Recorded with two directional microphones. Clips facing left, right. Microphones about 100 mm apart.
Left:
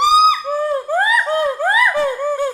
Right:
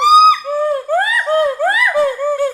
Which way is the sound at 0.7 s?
20° left (ahead or behind).